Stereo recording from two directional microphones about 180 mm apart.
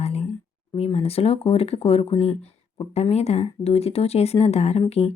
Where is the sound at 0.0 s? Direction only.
35° left (ahead or behind).